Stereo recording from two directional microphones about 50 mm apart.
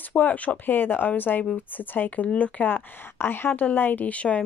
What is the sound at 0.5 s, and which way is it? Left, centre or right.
A woman's voice, left.